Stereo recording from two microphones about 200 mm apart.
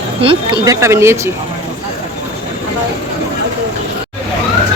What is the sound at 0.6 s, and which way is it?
Speech, 15° right (ahead or behind).